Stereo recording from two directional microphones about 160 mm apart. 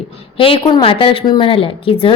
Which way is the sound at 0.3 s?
35° left (ahead or behind).